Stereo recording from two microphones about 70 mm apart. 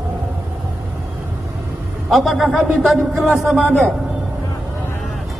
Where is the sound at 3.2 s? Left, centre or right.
Right.